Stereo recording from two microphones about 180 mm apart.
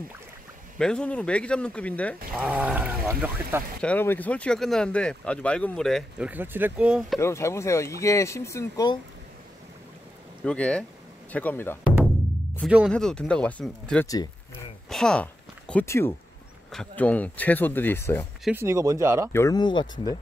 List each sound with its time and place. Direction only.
0.7 s speech: 5° left (ahead or behind)
2.3 s speech: 10° right (ahead or behind)
3.8 s speech: 10° left (ahead or behind)
7.2 s speech: 15° left (ahead or behind)
10.4 s speech: 5° left (ahead or behind)
12.6 s speech: 5° right (ahead or behind)
12.9 s speech: 5° left (ahead or behind)
14.0 s speech: 20° left (ahead or behind)
14.9 s speech: 5° left (ahead or behind)
15.7 s speech: 15° left (ahead or behind)
18.4 s speech: 10° right (ahead or behind)
19.3 s speech: 20° left (ahead or behind)